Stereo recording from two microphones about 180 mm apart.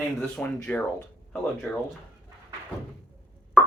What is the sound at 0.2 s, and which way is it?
Speech, 5° left (ahead or behind).